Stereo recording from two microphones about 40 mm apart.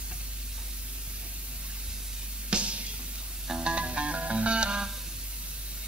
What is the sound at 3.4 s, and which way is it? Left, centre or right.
Music, centre.